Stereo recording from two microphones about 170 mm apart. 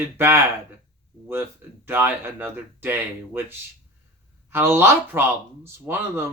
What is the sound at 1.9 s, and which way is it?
Speech, 10° right (ahead or behind).